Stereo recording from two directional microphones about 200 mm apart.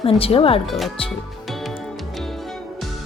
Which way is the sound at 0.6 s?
Centre (ahead or behind).